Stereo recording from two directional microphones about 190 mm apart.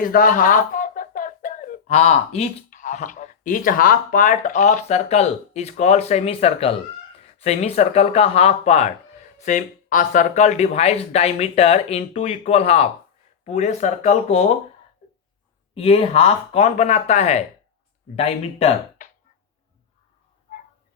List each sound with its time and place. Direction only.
0.0 s speech: 45° left (ahead or behind)
15.7 s speech: 30° left (ahead or behind)
20.5 s a sound: 45° left (ahead or behind)